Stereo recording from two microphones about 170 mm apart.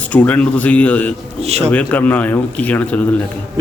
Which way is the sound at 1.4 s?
35° right (ahead or behind).